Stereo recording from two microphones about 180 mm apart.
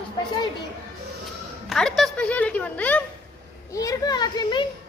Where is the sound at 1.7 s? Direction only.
Centre (ahead or behind).